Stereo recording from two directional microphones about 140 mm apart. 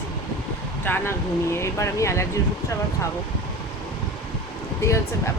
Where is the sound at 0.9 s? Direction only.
15° left (ahead or behind).